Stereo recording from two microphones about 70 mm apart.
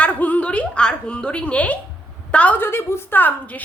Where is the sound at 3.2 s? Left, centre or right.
Left.